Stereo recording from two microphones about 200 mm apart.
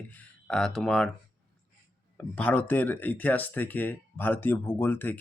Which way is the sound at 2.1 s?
10° left (ahead or behind).